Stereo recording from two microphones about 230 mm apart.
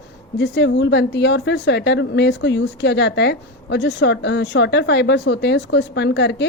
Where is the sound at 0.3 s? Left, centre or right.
Left.